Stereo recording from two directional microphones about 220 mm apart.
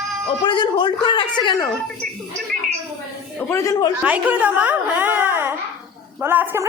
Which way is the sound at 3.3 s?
15° left (ahead or behind).